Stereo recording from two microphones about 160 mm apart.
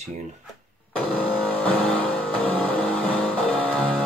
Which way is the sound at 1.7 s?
10° left (ahead or behind).